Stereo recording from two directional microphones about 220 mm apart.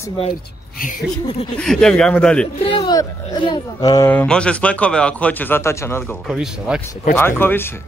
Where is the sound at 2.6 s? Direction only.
25° left (ahead or behind); by 6.8 s centre (ahead or behind).